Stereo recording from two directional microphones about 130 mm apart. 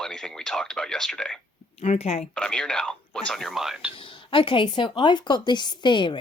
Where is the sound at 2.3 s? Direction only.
5° left (ahead or behind).